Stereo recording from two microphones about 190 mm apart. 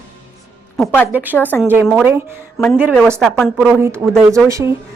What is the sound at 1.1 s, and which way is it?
Speech, 10° right (ahead or behind).